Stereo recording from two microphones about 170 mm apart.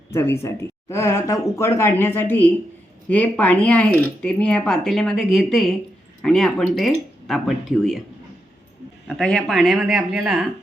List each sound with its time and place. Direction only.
0.1 s speech: 15° left (ahead or behind); by 8.0 s centre (ahead or behind)
9.0 s speech: 5° left (ahead or behind)